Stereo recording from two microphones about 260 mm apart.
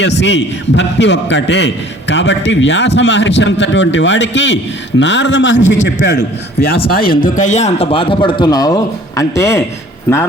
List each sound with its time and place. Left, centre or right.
0.0 s a man's voice: left; by 9.6 s centre